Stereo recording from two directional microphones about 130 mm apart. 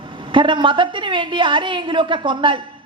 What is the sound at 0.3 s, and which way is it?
A woman's voice, 40° right (ahead or behind).